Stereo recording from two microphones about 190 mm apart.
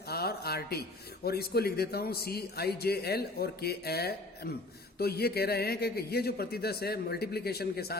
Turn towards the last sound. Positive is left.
turn(degrees=55)  # may be behind; listen again after turning